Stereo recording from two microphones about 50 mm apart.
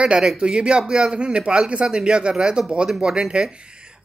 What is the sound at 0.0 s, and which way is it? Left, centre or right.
Speech, centre.